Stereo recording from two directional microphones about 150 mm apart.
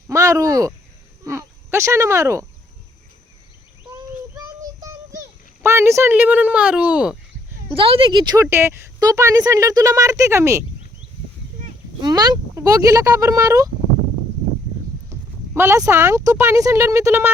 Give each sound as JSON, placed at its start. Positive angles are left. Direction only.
{"t": 0.1, "sound": "a sound", "side_deg": -20}
{"t": 4.4, "sound": "child singing", "side_deg": -25}
{"t": 5.6, "sound": "speech", "side_deg": -15}
{"t": 7.8, "sound": "a woman's voice", "side_deg": -35}
{"t": 8.4, "sound": "speech", "side_deg": -15}
{"t": 12.0, "sound": "speech", "side_deg": -25}
{"t": 15.5, "sound": "speech", "side_deg": -15}